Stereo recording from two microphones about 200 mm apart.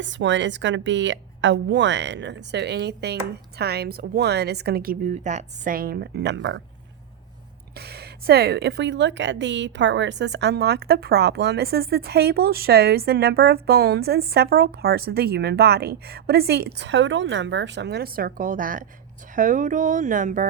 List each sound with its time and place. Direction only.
0.0 s a woman's voice: 65° right (ahead or behind)
7.8 s a woman's voice: 55° right (ahead or behind)